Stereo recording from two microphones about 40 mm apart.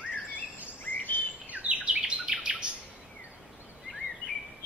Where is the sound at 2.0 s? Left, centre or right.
Centre.